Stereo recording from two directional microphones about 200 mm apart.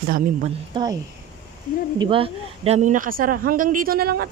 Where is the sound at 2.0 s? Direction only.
25° right (ahead or behind); by 4.2 s 50° right (ahead or behind).